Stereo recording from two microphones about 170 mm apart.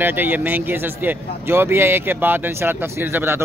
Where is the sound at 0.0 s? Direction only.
10° right (ahead or behind).